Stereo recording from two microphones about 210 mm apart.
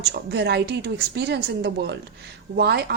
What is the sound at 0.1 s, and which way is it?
A woman's voice, 55° right (ahead or behind).